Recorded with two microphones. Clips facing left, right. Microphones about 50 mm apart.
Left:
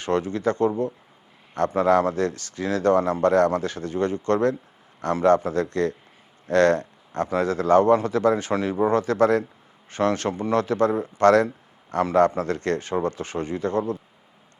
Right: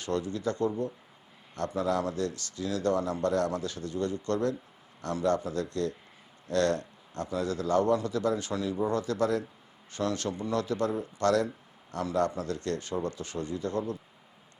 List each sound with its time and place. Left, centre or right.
0.0 s a man's voice: left